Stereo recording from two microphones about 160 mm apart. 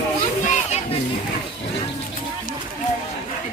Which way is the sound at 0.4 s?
50° left (ahead or behind).